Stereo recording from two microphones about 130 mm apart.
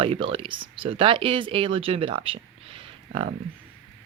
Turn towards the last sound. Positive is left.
turn(degrees=-45)  # may be behind; listen again after turning